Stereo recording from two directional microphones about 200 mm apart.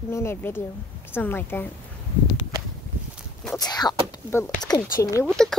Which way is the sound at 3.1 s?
Centre (ahead or behind).